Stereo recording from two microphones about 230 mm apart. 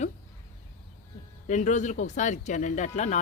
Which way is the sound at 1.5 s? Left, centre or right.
Left.